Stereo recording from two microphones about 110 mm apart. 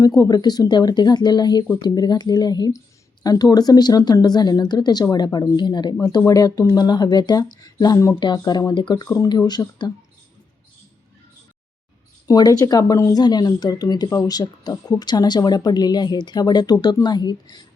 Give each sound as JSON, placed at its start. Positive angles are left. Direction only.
{"t": 0.0, "sound": "speech", "side_deg": 35}
{"t": 8.2, "sound": "speech", "side_deg": 40}
{"t": 9.1, "sound": "speech", "side_deg": 35}
{"t": 12.3, "sound": "speech", "side_deg": 35}